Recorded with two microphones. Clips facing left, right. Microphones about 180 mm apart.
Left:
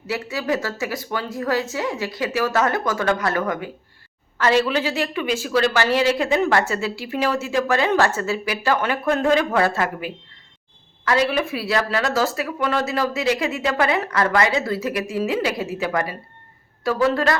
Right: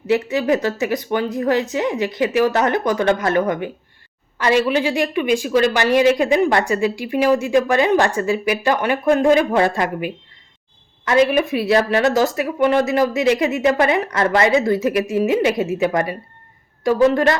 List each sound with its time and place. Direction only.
0.1 s a woman's voice: 20° right (ahead or behind)